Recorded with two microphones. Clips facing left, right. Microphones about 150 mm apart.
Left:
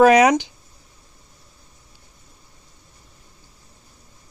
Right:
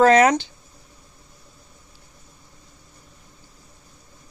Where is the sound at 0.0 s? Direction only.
15° left (ahead or behind).